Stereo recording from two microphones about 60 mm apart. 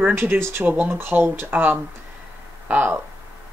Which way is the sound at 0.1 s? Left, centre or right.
Right.